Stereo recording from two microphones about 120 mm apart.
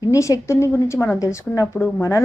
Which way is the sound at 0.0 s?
30° left (ahead or behind).